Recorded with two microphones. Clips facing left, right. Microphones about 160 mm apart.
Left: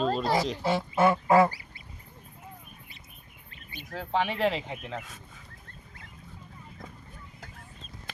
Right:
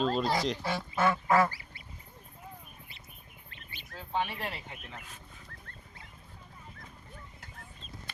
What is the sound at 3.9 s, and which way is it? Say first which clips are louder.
Speech: left 5 dB; 90° left.